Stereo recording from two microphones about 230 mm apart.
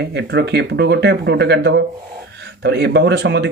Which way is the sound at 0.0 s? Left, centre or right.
Right.